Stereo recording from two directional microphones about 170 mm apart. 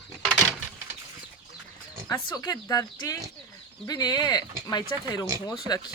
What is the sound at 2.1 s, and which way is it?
Speech, 20° left (ahead or behind).